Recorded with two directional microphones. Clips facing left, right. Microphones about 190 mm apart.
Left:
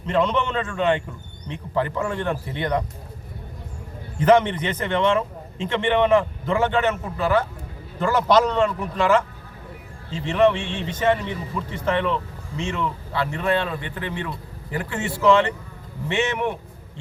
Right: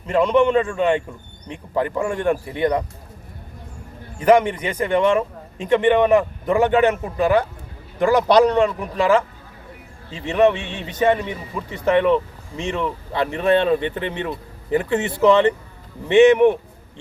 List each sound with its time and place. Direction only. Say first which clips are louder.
0.1 s a man's voice: right 6 dB; 10° right (ahead or behind)
4.2 s a man's voice: right 2 dB; 10° right (ahead or behind)
10.2 s a man's voice: right 2 dB; 15° right (ahead or behind)